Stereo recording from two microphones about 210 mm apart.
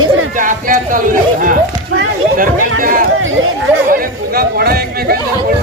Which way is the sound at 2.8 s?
40° right (ahead or behind).